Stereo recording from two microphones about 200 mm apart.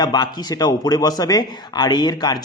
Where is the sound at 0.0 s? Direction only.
20° left (ahead or behind).